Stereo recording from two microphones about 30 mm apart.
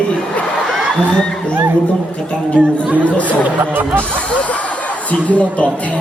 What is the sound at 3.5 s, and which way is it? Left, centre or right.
Speech, right.